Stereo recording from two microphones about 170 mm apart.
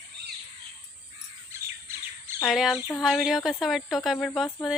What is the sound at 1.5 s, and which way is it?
Bird, 15° right (ahead or behind).